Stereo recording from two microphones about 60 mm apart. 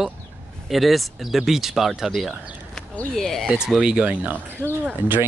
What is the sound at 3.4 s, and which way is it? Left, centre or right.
Speech, centre.